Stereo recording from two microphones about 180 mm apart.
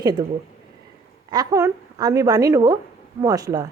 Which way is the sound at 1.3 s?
20° right (ahead or behind).